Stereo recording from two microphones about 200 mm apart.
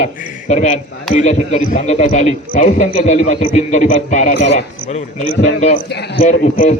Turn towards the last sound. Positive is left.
turn(degrees=40)  # may be behind; listen again after turning